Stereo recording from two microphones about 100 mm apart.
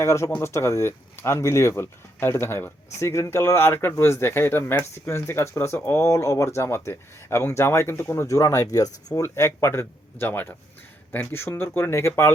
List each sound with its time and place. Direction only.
0.0 s speech: 30° left (ahead or behind)
9.2 s speech: 25° left (ahead or behind)